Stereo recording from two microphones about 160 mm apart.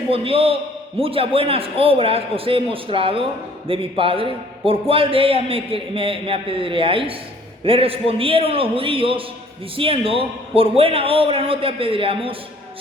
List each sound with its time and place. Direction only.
0.1 s a man's voice: 35° right (ahead or behind)